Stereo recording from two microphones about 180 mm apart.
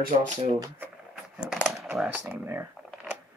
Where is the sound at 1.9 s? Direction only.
5° right (ahead or behind).